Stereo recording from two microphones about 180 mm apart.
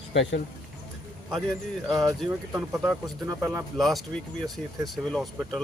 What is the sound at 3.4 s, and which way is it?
Speech, centre (ahead or behind).